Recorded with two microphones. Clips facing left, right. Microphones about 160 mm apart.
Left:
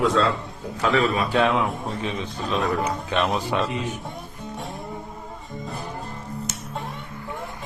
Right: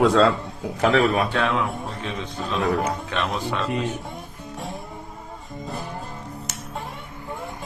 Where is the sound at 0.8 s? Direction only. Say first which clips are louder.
Right 2 dB; 65° right (ahead or behind).